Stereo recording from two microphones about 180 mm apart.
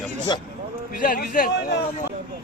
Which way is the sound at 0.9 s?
50° left (ahead or behind).